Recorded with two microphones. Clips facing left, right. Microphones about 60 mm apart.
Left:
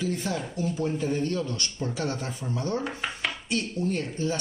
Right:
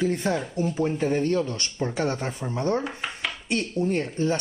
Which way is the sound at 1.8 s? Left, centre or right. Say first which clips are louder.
Right 5 dB; right.